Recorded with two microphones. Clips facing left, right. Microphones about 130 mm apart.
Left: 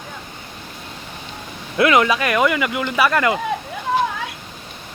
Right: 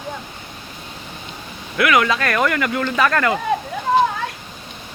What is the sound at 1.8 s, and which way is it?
Speech, 25° left (ahead or behind).